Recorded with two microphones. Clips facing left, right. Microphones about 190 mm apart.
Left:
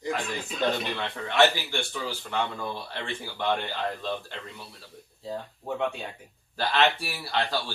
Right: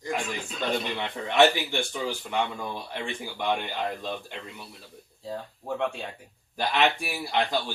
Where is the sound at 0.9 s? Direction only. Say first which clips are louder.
Right 2 dB; 15° right (ahead or behind).